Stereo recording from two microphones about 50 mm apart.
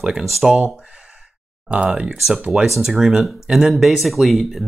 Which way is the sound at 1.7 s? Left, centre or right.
Right.